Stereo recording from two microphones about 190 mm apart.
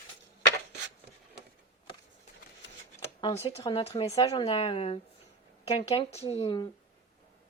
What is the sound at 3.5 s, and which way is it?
Speech, 30° left (ahead or behind).